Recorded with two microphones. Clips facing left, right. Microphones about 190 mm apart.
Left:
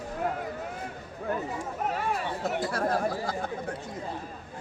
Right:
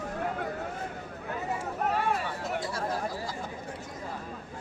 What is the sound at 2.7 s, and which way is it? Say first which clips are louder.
Speech: left 5 dB; 60° left (ahead or behind).